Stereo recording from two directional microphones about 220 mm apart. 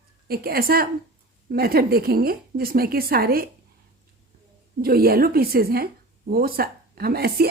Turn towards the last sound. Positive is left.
turn(degrees=-45)  # may be behind; listen again after turning